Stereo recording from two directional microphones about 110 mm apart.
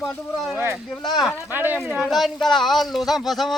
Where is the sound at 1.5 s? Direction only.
15° right (ahead or behind).